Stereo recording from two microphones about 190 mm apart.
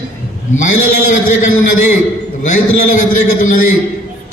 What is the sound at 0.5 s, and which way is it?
Speech, 40° left (ahead or behind).